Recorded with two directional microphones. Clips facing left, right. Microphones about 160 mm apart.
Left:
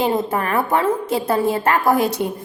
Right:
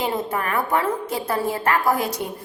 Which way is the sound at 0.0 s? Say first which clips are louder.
Left 5 dB; 30° left (ahead or behind).